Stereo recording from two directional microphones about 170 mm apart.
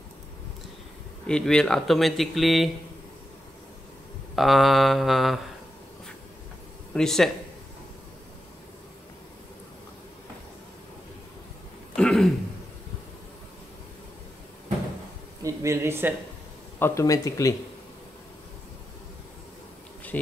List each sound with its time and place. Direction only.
1.2 s speech: 5° left (ahead or behind)
4.4 s speech: centre (ahead or behind)
6.9 s speech: 5° left (ahead or behind)
12.0 s throat clearing: 5° left (ahead or behind)
15.4 s a sound: 15° right (ahead or behind)
16.8 s speech: 20° left (ahead or behind)